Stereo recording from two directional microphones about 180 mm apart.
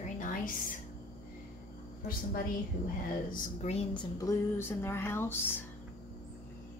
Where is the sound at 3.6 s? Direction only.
30° left (ahead or behind).